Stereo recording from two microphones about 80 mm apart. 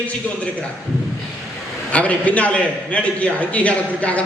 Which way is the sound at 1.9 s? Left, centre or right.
Centre.